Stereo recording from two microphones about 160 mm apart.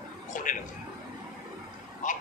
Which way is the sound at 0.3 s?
55° left (ahead or behind).